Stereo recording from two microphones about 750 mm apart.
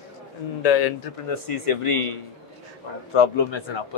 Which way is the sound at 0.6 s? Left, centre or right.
Left.